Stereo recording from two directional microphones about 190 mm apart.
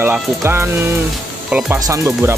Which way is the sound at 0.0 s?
10° right (ahead or behind).